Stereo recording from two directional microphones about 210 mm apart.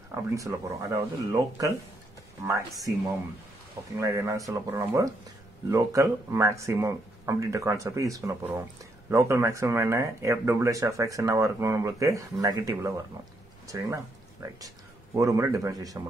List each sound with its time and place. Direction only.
0.1 s speech: 15° right (ahead or behind)
4.0 s speech: 15° right (ahead or behind)